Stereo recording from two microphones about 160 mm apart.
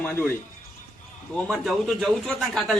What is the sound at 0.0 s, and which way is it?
Speech, 10° left (ahead or behind).